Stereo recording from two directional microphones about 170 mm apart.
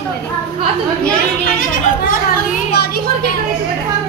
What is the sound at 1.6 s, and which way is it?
Speech, 55° left (ahead or behind).